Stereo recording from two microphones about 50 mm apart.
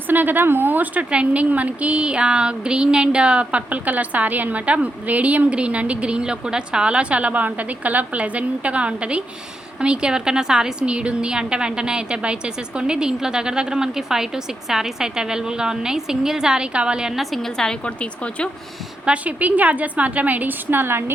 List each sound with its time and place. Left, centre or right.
0.1 s a woman's voice: right
1.1 s a sound: right
9.8 s a woman's voice: centre
16.7 s a sound: centre
17.2 s a woman's voice: centre
17.8 s speech: left
19.0 s a woman's voice: right